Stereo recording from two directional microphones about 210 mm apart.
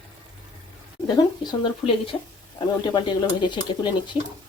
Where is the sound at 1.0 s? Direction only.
20° left (ahead or behind).